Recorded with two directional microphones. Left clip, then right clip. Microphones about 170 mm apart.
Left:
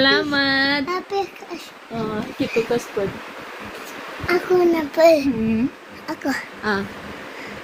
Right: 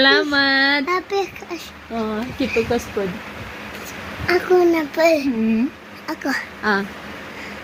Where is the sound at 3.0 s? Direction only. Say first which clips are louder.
Even; 5° right (ahead or behind).